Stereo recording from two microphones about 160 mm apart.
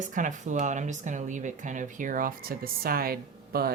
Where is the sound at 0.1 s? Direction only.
55° right (ahead or behind).